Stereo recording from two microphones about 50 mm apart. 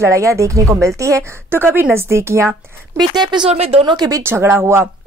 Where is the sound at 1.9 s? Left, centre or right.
Right.